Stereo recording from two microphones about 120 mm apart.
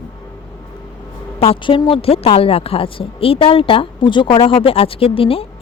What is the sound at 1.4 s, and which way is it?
A woman's voice, 50° left (ahead or behind).